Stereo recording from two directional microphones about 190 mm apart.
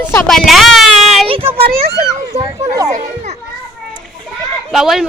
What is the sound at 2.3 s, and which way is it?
Speech, 35° right (ahead or behind).